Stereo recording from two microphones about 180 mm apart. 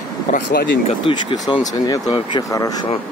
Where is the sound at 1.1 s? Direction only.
30° left (ahead or behind).